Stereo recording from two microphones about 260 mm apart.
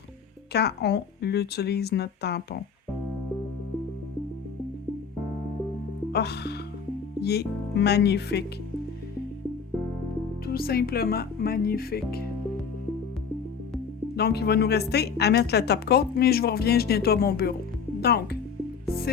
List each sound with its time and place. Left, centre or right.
0.5 s a woman's voice: left
6.1 s music: left
7.2 s a woman's voice: left
10.4 s a woman's voice: left
14.2 s a woman's voice: left